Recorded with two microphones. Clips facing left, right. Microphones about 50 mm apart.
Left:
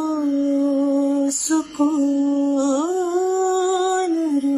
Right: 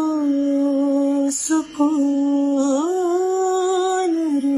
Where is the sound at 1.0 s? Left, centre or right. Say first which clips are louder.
Right 1 dB; right.